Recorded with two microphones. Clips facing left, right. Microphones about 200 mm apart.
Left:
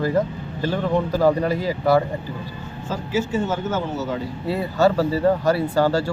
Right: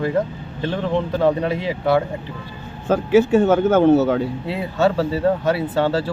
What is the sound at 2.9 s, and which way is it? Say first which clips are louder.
Speech: right 9 dB; 60° right (ahead or behind).